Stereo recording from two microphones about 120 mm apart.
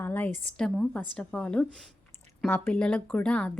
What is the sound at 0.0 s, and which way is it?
A woman's voice, 15° left (ahead or behind).